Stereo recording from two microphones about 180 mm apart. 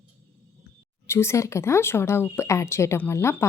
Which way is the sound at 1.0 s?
15° left (ahead or behind).